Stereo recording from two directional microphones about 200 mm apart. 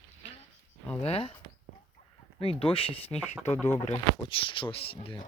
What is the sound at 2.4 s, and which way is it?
Speech, 30° left (ahead or behind).